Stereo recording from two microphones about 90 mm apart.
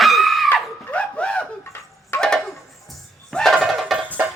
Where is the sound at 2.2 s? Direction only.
5° left (ahead or behind).